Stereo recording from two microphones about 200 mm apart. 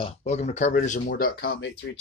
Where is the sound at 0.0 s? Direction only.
35° left (ahead or behind).